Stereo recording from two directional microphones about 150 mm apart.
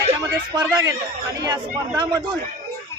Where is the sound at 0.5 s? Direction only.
30° right (ahead or behind).